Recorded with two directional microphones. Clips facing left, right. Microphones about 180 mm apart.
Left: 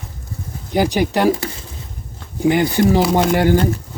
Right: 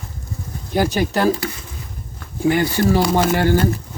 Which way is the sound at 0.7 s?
15° left (ahead or behind).